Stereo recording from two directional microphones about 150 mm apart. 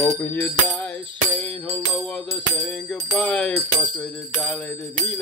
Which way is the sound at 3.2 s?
5° left (ahead or behind).